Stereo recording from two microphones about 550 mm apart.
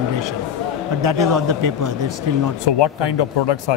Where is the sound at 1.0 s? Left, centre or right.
Right.